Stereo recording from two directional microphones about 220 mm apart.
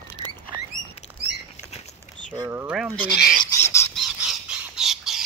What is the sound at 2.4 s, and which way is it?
Speech, 10° right (ahead or behind).